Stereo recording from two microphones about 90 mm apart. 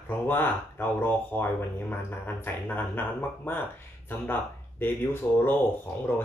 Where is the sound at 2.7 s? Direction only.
20° left (ahead or behind).